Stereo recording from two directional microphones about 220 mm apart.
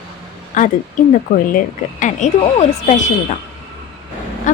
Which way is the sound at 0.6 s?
35° left (ahead or behind).